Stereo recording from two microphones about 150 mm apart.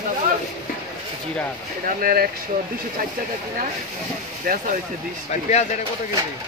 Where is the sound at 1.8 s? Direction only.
80° right.